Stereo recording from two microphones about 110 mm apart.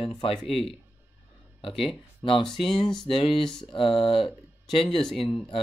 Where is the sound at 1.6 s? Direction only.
55° left (ahead or behind).